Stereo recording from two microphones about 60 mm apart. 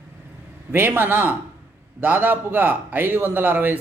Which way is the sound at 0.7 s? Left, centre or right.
Right.